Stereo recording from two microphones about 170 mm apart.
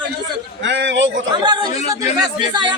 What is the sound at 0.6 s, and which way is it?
Speech, 90° right.